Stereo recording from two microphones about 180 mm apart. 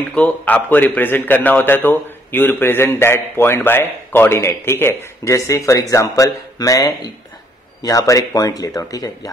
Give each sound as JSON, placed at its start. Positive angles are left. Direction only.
{"t": 0.1, "sound": "a man's voice", "side_deg": 10}